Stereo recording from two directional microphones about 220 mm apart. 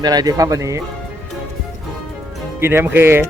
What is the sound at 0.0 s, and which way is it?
Speech, 20° right (ahead or behind).